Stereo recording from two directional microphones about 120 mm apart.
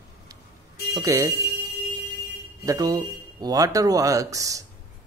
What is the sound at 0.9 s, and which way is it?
Speech, 25° right (ahead or behind).